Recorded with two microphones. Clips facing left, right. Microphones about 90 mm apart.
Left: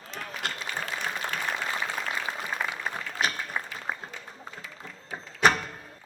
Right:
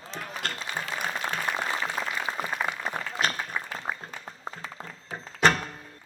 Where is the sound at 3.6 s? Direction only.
10° left (ahead or behind).